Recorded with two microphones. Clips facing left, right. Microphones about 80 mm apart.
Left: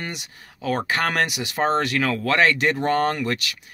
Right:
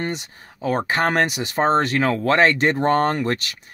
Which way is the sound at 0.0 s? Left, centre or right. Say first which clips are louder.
Right 6 dB; right.